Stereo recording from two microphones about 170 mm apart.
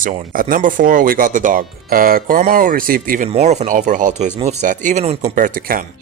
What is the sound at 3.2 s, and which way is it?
Speech, 40° right (ahead or behind).